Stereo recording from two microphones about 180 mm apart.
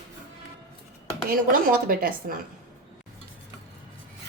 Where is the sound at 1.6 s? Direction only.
55° right (ahead or behind).